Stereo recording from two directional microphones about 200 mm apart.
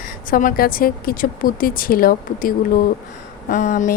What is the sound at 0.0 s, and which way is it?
A woman's voice, 45° left (ahead or behind).